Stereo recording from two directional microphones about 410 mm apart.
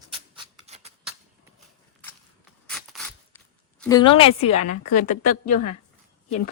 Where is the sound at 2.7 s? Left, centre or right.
Centre.